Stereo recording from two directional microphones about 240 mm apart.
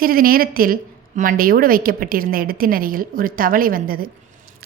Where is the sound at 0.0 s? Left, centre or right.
Right.